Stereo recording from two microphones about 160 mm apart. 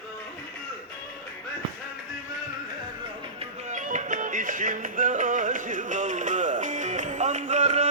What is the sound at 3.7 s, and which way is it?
Music, 50° right (ahead or behind).